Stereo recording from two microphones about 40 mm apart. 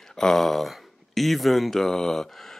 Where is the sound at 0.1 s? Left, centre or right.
Centre.